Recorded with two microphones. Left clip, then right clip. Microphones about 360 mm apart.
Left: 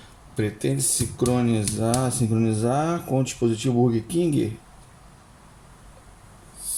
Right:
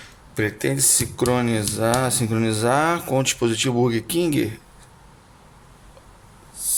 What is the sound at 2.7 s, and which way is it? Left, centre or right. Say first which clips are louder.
Speech: right 8 dB; right.